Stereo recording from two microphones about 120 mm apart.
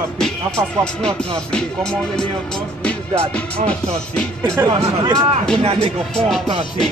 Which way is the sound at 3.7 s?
10° left (ahead or behind).